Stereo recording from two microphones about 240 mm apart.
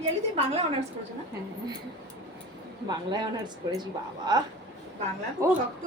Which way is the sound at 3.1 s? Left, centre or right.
Centre.